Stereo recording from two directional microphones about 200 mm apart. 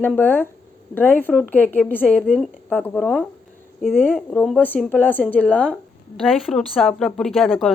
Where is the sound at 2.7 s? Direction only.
10° left (ahead or behind).